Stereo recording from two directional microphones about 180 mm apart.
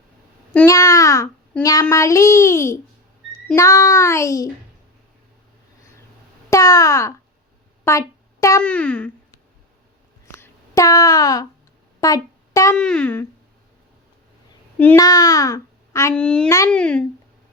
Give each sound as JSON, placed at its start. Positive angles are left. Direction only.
{"t": 0.5, "sound": "child singing", "side_deg": 15}
{"t": 3.3, "sound": "a child's voice", "side_deg": 15}
{"t": 6.5, "sound": "a child's voice", "side_deg": 20}
{"t": 10.4, "sound": "a sound", "side_deg": 20}
{"t": 11.9, "sound": "music", "side_deg": 20}
{"t": 12.7, "sound": "speech", "side_deg": 5}
{"t": 14.9, "sound": "a child's voice", "side_deg": 20}